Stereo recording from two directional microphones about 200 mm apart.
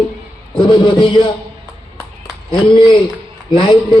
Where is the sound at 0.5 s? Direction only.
25° left (ahead or behind).